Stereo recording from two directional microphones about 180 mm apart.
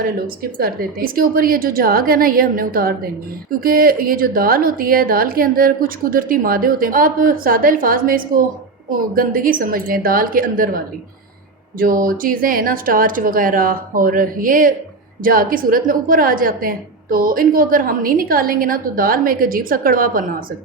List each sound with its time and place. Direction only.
0.6 s a woman's voice: 55° right (ahead or behind)
11.8 s a woman's voice: 50° right (ahead or behind)